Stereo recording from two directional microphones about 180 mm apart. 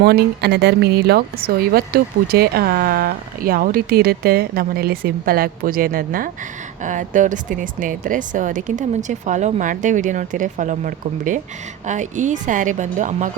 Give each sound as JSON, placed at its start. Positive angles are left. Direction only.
{"t": 0.0, "sound": "a woman's voice", "side_deg": -60}